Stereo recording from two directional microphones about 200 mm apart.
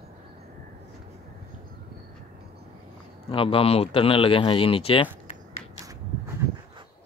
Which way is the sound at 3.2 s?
25° left (ahead or behind).